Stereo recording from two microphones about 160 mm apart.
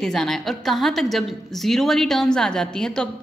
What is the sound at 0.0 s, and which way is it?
A woman's voice, centre (ahead or behind).